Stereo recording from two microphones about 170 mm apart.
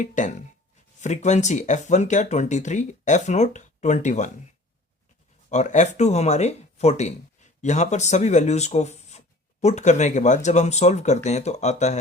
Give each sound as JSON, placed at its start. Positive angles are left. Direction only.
{"t": 0.0, "sound": "speech", "side_deg": 45}
{"t": 5.5, "sound": "speech", "side_deg": 45}